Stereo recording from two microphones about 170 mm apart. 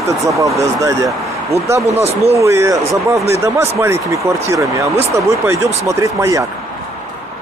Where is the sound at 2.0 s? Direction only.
40° right (ahead or behind).